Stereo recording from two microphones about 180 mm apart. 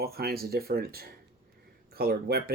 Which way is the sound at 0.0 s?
60° right (ahead or behind).